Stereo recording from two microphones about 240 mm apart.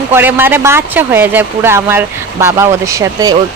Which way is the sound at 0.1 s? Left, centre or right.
Centre.